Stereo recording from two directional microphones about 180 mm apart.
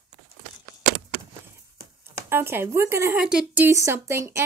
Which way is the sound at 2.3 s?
10° right (ahead or behind).